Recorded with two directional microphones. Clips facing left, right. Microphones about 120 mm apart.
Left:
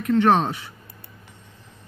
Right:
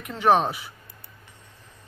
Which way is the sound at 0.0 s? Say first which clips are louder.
Left 2 dB; 10° right (ahead or behind).